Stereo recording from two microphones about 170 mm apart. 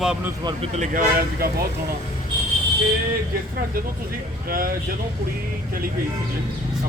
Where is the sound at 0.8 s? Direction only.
55° right (ahead or behind).